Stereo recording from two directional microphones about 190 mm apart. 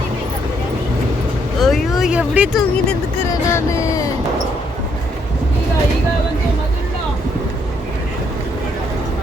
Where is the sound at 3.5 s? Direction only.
15° left (ahead or behind).